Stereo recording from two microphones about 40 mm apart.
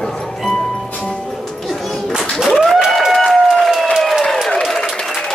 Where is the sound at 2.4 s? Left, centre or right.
Centre.